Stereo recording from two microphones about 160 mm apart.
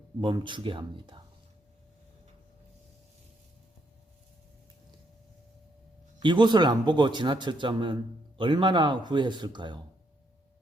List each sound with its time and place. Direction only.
0.2 s a man's voice: 30° right (ahead or behind)
6.2 s a man's voice: 30° right (ahead or behind)